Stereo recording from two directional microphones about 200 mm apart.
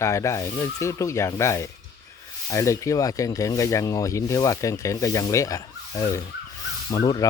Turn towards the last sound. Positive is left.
turn(degrees=20)  # may be behind; listen again after turning